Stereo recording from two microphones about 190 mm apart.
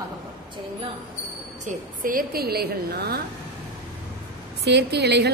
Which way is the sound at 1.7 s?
45° right (ahead or behind).